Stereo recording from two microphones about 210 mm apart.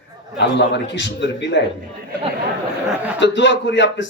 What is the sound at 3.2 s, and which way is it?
Speech, 60° left (ahead or behind).